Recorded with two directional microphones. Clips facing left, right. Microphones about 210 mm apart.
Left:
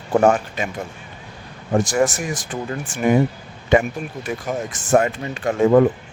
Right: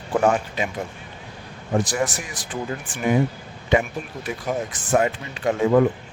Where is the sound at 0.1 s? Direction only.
45° left (ahead or behind).